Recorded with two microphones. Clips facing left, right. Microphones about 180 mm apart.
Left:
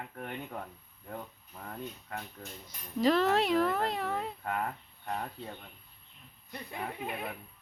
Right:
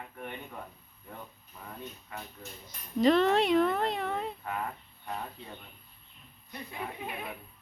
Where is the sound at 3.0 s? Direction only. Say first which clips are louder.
Right 3 dB; centre (ahead or behind).